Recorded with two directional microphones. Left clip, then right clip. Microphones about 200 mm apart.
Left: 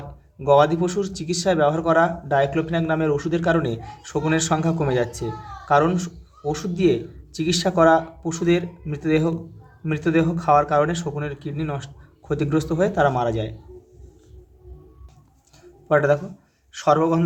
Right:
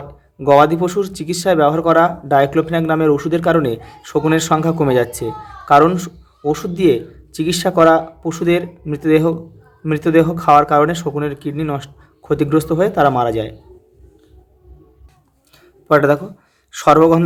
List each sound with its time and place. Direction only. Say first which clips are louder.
0.3 s a man's voice: right 6 dB; 30° right (ahead or behind)
15.9 s speech: right 6 dB; 35° right (ahead or behind)